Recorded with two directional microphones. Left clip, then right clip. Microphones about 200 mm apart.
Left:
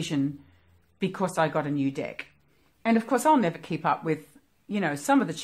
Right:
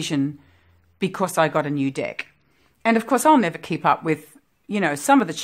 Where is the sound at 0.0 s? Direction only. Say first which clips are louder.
Right 5 dB; 35° right (ahead or behind).